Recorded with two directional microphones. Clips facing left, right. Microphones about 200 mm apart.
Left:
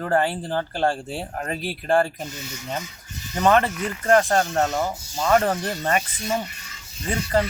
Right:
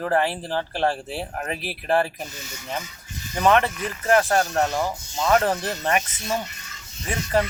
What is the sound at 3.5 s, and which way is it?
Speech, centre (ahead or behind).